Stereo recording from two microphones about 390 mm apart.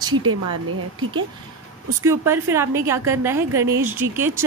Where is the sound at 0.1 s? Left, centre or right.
Right.